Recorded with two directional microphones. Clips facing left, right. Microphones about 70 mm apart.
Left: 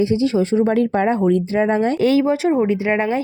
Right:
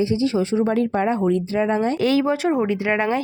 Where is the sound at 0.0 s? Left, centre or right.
Left.